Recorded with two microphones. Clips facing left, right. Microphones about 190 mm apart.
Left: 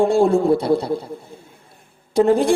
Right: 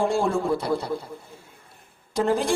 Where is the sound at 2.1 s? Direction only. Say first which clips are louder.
Left 8 dB; 60° left (ahead or behind).